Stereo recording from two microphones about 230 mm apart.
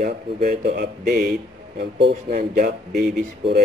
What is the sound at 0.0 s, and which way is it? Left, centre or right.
A man's voice, right.